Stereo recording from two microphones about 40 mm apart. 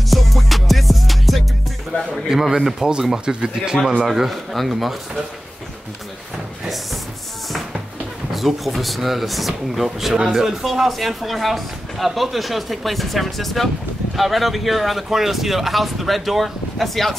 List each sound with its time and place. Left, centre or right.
0.1 s music: centre
2.2 s speech: centre
8.3 s speech: centre